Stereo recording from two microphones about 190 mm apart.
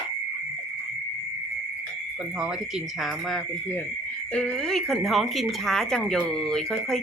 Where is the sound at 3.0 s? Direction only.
Centre (ahead or behind).